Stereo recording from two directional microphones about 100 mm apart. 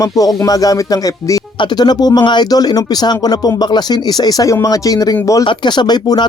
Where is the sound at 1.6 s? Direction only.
45° left (ahead or behind).